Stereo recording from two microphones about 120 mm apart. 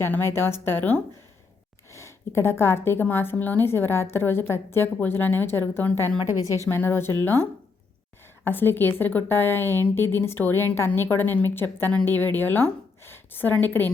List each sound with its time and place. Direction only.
0.0 s a woman's voice: 20° left (ahead or behind)
8.4 s a woman's voice: 15° left (ahead or behind)